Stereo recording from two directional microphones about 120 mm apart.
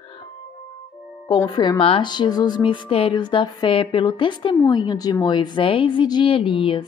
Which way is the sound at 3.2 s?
40° left (ahead or behind).